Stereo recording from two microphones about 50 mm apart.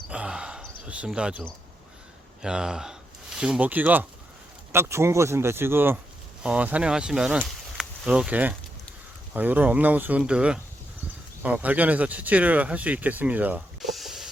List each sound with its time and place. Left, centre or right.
0.1 s a sound: centre
1.0 s speech: centre
2.4 s speech: centre
3.6 s speech: right
4.7 s speech: right
6.4 s speech: right
6.9 s speech: centre
8.3 s speech: right
10.2 s speech: right
11.4 s speech: right
13.8 s a sound: centre